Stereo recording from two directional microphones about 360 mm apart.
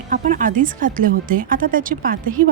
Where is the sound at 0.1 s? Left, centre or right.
Right.